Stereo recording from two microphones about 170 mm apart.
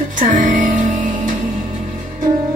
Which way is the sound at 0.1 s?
50° right (ahead or behind).